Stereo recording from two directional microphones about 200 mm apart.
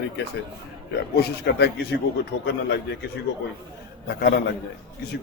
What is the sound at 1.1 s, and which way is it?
Speech, 55° left (ahead or behind).